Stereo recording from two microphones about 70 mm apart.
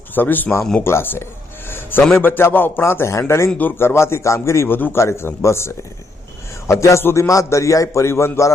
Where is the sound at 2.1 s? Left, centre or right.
Left.